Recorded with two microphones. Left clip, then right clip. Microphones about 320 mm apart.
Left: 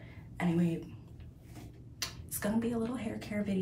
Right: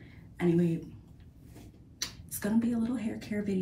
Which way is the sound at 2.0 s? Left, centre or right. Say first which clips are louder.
Right 1 dB; centre.